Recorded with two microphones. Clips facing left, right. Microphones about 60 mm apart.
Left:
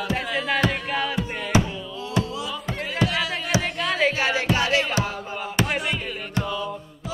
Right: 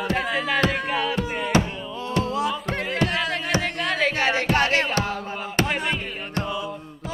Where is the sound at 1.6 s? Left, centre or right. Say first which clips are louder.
Right 2 dB; right.